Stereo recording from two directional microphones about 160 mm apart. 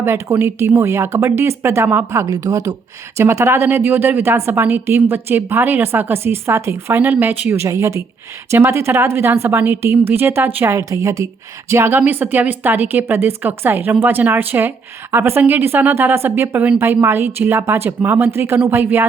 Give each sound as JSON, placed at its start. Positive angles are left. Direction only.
{"t": 0.0, "sound": "a woman's voice", "side_deg": -15}